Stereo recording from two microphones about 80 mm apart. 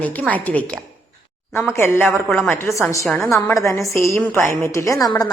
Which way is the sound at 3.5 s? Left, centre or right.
Left.